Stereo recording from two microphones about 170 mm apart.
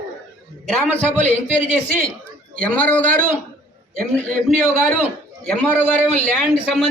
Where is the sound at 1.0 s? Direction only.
45° right (ahead or behind).